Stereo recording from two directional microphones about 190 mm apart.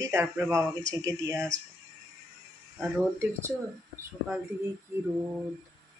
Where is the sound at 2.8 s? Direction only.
15° right (ahead or behind).